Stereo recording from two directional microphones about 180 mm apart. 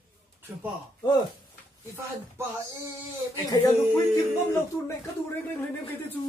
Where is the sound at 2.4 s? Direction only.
15° right (ahead or behind).